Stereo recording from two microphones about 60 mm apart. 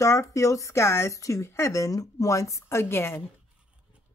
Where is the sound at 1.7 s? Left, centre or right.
Left.